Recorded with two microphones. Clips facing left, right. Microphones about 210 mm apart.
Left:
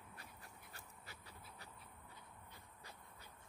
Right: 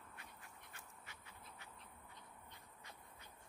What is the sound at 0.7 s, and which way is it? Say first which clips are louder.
Quack: left 1 dB; 35° left (ahead or behind).